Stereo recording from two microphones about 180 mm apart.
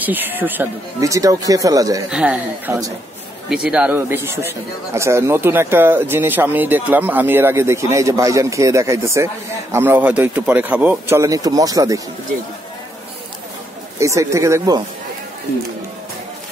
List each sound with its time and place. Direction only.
0.0 s speech: 10° right (ahead or behind)
2.0 s speech: 5° right (ahead or behind)
13.9 s speech: 15° right (ahead or behind)